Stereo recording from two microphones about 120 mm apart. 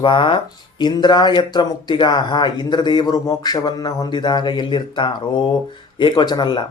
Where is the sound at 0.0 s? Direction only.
45° left (ahead or behind).